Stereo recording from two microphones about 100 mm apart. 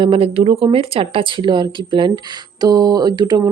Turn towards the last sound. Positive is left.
turn(degrees=-45)  # may be behind; listen again after turning